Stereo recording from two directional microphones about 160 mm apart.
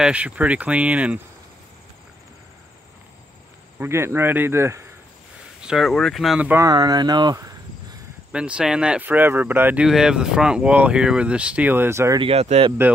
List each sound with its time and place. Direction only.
0.0 s speech: 10° right (ahead or behind)
3.8 s speech: 15° right (ahead or behind)
5.6 s speech: 5° right (ahead or behind)
6.6 s speech: 25° right (ahead or behind)
8.3 s speech: 5° right (ahead or behind)
12.2 s speech: 40° right (ahead or behind)